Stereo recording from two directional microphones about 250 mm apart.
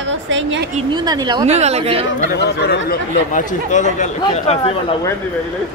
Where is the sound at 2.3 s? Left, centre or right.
Left.